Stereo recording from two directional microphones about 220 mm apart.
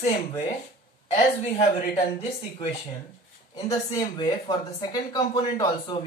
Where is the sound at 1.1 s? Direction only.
30° left (ahead or behind).